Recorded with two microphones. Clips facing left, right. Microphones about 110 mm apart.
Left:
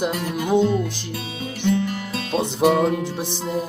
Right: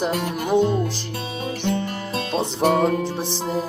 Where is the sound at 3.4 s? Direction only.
30° right (ahead or behind).